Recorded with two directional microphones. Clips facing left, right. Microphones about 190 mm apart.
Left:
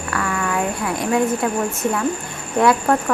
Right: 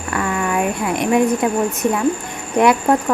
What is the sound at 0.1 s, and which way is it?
Speech, 20° right (ahead or behind).